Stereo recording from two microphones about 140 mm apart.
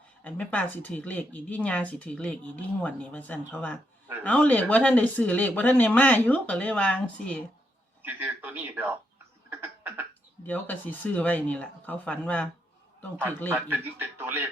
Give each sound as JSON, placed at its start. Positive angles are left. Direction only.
{"t": 0.3, "sound": "speech", "side_deg": 10}
{"t": 8.0, "sound": "a man's voice", "side_deg": -15}
{"t": 9.5, "sound": "a sound", "side_deg": -15}
{"t": 10.4, "sound": "speech", "side_deg": 10}
{"t": 13.5, "sound": "a man's voice", "side_deg": -15}